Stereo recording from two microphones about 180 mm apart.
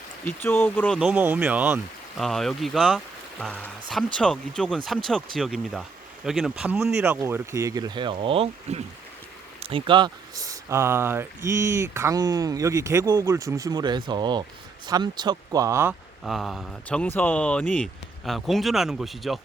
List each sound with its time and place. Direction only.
0.3 s speech: 10° left (ahead or behind)
0.9 s speech: 5° right (ahead or behind)
7.0 s speech: 10° right (ahead or behind)
16.2 s speech: centre (ahead or behind)